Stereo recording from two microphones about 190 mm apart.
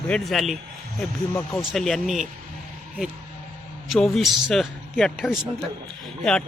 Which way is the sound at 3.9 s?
Centre (ahead or behind).